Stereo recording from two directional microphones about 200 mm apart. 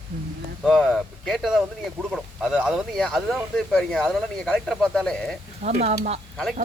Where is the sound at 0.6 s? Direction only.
Centre (ahead or behind).